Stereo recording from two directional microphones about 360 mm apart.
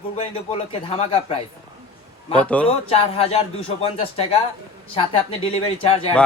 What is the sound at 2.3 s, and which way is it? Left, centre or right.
Speech, centre.